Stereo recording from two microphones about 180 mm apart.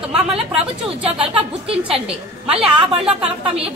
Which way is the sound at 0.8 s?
30° right (ahead or behind).